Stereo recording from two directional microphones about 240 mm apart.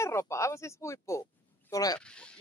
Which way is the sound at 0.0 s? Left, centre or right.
Centre.